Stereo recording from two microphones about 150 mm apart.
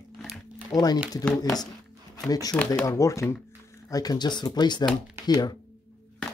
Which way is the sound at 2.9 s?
20° left (ahead or behind).